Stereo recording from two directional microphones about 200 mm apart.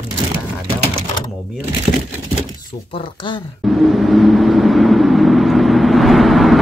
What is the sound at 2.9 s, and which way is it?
Speech, 25° left (ahead or behind).